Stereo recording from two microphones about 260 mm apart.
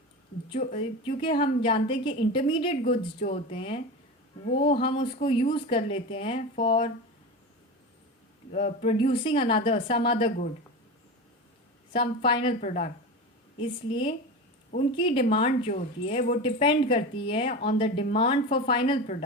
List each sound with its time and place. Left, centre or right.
0.5 s speech: left
2.8 s speech: left
8.5 s speech: left
11.9 s speech: centre